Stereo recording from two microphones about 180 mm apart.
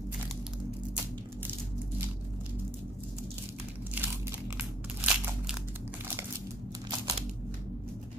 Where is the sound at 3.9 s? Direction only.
10° right (ahead or behind).